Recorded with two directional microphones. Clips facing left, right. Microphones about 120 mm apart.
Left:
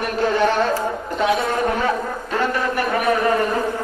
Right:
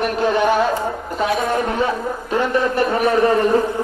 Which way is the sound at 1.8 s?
20° right (ahead or behind).